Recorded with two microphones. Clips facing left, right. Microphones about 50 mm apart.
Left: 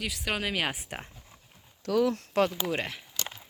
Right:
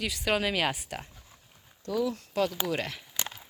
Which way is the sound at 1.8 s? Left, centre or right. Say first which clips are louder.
Left 4 dB; left.